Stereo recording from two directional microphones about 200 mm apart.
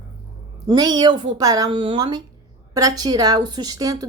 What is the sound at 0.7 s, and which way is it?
A woman's voice, 20° right (ahead or behind).